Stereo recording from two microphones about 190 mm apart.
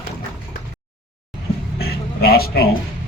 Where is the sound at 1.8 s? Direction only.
55° left (ahead or behind).